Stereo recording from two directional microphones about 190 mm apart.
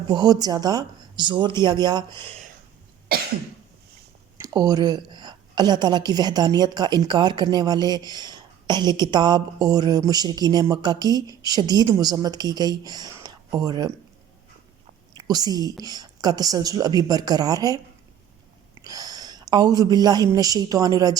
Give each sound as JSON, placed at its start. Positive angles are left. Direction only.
{"t": 0.1, "sound": "a woman's voice", "side_deg": -20}
{"t": 4.4, "sound": "a woman's voice", "side_deg": -20}
{"t": 15.1, "sound": "a woman's voice", "side_deg": -20}